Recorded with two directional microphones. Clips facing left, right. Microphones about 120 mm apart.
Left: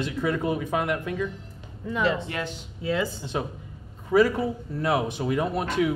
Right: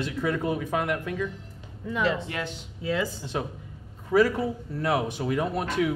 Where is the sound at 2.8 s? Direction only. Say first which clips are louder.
Left 1 dB; 25° left (ahead or behind).